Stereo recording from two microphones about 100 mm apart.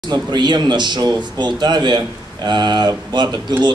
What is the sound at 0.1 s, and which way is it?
Speech, 50° right (ahead or behind).